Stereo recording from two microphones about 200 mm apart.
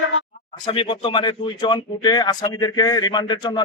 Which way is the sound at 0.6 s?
25° left (ahead or behind).